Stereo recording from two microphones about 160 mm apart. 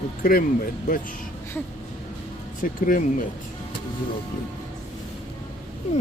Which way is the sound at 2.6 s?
60° left (ahead or behind).